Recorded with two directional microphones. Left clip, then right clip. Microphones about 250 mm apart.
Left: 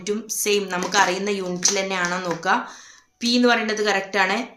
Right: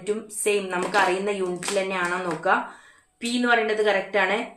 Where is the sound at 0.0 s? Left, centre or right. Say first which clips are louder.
Left 1 dB; left.